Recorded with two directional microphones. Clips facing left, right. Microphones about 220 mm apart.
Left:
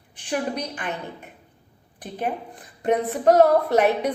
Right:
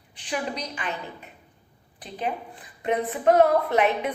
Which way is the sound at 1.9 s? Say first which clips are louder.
Left 2 dB; 50° left (ahead or behind).